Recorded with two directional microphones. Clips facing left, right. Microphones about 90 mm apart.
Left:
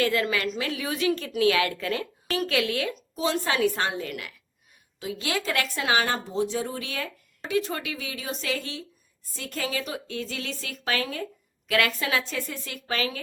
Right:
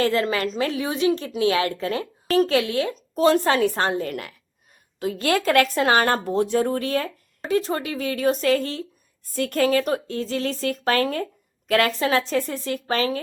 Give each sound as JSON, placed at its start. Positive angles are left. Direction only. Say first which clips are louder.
{"t": 0.0, "sound": "a woman's voice", "louder": "right 3 dB", "side_deg": -35}
{"t": 3.2, "sound": "a woman's voice", "louder": "right 7 dB", "side_deg": -50}
{"t": 11.9, "sound": "a woman's voice", "louder": "right 6 dB", "side_deg": -35}